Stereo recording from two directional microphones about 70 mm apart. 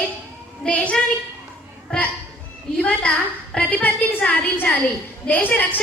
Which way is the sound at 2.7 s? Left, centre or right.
Centre.